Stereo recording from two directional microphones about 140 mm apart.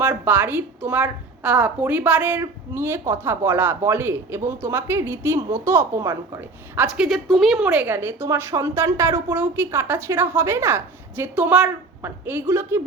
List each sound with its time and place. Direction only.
0.0 s a woman's voice: 10° right (ahead or behind)
6.8 s a woman's voice: 5° right (ahead or behind)